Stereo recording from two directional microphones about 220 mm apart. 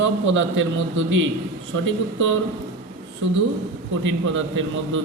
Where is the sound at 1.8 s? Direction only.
60° right (ahead or behind).